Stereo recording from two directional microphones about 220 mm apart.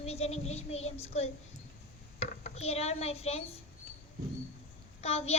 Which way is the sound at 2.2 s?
30° left (ahead or behind).